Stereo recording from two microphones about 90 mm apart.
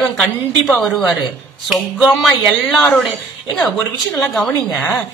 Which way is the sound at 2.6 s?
15° left (ahead or behind).